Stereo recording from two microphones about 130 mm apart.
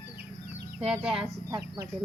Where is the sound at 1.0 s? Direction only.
5° right (ahead or behind).